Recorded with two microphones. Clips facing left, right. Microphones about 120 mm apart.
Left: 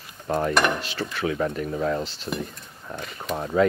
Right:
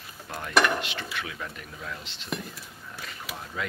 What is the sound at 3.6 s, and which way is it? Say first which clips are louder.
Speech: left 15 dB; 35° left (ahead or behind).